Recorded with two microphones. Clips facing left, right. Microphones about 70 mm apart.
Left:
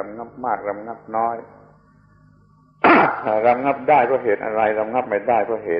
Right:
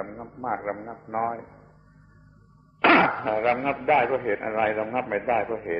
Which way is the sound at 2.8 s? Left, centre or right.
Centre.